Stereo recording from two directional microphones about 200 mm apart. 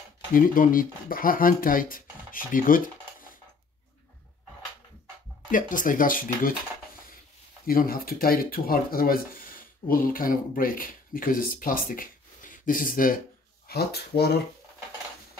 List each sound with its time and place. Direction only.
0.3 s speech: 45° left (ahead or behind)
5.5 s speech: 40° left (ahead or behind)
7.6 s speech: 45° left (ahead or behind)